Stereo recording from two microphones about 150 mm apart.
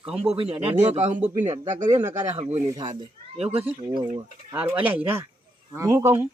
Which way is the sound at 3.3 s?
40° right (ahead or behind).